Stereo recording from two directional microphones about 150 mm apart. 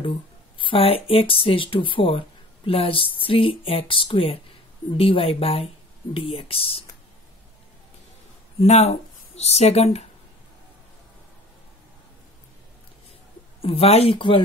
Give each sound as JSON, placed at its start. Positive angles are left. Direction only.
{"t": 0.6, "sound": "speech", "side_deg": 35}
{"t": 8.5, "sound": "speech", "side_deg": 45}
{"t": 13.6, "sound": "speech", "side_deg": 40}